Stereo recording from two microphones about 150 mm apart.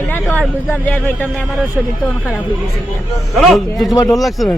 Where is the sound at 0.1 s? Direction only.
10° left (ahead or behind).